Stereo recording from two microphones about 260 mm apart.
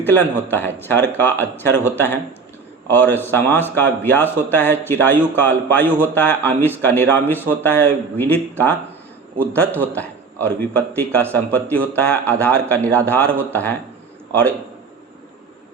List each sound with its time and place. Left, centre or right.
0.0 s a man's voice: centre